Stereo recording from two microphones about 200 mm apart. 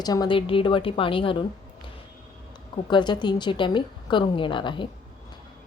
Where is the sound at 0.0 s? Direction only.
20° left (ahead or behind).